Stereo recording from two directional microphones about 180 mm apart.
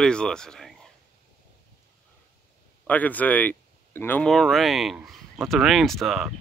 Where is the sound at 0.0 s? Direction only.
5° left (ahead or behind).